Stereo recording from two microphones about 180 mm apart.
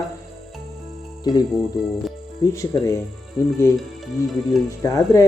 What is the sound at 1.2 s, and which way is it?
Speech, 20° left (ahead or behind).